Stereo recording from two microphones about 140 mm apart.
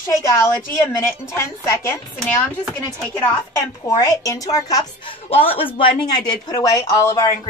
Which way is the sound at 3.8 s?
25° left (ahead or behind).